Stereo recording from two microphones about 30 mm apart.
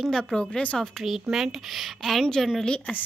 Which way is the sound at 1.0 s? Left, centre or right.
Centre.